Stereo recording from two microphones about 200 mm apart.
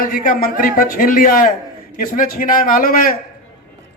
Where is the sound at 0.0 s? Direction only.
45° left (ahead or behind).